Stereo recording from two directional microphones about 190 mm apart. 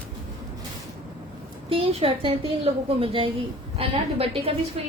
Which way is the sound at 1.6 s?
30° right (ahead or behind).